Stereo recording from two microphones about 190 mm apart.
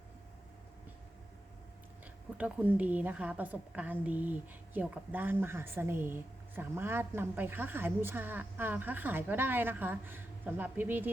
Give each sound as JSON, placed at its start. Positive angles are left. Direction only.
{"t": 2.4, "sound": "a woman's voice", "side_deg": -10}